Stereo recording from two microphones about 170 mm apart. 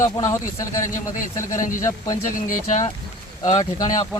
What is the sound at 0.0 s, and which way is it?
Speech, 20° left (ahead or behind).